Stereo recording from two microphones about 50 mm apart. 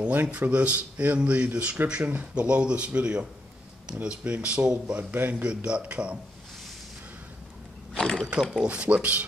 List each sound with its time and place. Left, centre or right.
0.1 s speech: right
8.0 s ratchet: centre
8.6 s speech: right